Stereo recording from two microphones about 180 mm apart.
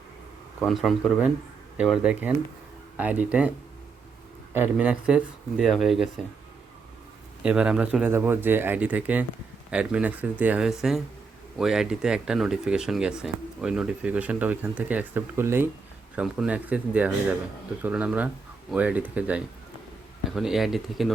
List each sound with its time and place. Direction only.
0.6 s speech: centre (ahead or behind)
4.5 s speech: 10° right (ahead or behind)
7.4 s speech: 5° right (ahead or behind)